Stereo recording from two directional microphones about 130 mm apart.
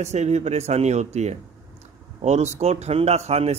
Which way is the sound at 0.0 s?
60° right (ahead or behind).